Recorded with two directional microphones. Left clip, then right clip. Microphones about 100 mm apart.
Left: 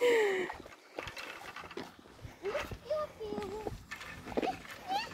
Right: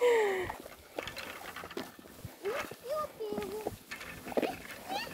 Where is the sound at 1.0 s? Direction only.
65° right (ahead or behind); by 1.8 s 90° right.